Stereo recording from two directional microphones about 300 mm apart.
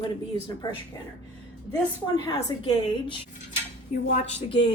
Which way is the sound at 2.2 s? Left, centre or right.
Centre.